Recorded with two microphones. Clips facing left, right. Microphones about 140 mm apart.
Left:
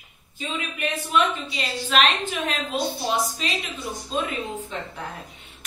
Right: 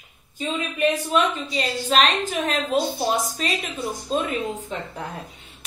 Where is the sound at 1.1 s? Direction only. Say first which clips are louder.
Right 1 dB; 40° right (ahead or behind).